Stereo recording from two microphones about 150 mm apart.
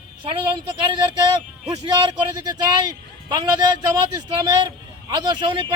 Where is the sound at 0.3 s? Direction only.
30° right (ahead or behind).